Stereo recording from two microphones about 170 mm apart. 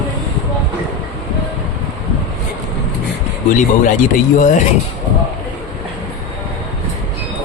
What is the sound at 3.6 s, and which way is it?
Speech, 50° left (ahead or behind).